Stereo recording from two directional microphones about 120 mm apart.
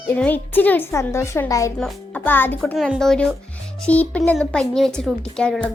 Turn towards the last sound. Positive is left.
turn(degrees=10)  # may be behind; listen again after turning